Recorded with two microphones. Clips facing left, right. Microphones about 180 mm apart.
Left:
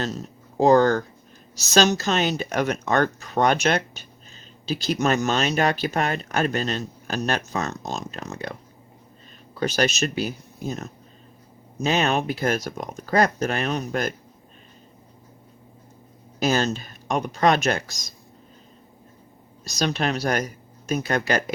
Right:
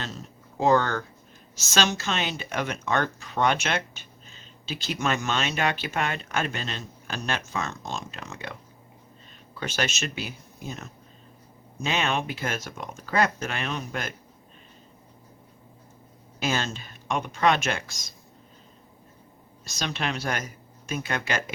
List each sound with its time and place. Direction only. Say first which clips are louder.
0.0 s speech: left 8 dB; 40° left (ahead or behind)
9.6 s speech: left 7 dB; 40° left (ahead or behind)
16.4 s speech: left 6 dB; 40° left (ahead or behind)
19.6 s speech: left 6 dB; 40° left (ahead or behind)